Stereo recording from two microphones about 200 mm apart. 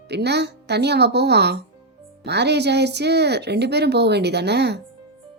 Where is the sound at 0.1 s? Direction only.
55° right (ahead or behind).